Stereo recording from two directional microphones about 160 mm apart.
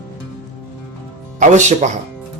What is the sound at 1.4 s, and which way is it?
Speech, 50° right (ahead or behind).